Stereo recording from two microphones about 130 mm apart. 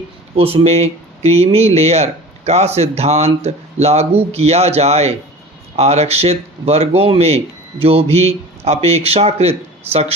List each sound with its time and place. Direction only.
0.3 s a man's voice: 45° right (ahead or behind)